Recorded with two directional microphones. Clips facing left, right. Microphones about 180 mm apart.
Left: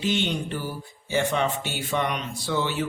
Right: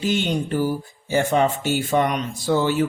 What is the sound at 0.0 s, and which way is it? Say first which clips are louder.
Speech: right 4 dB; 40° right (ahead or behind).